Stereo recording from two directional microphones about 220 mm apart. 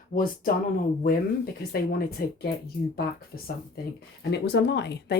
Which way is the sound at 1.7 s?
45° left (ahead or behind).